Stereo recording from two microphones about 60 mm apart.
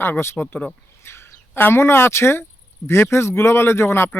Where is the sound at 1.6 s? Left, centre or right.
Left.